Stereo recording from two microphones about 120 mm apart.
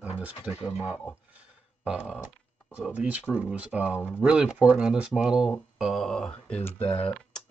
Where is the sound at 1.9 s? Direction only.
5° right (ahead or behind).